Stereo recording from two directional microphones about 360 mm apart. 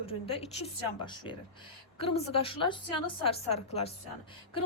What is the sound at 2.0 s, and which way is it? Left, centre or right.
A woman's voice, centre.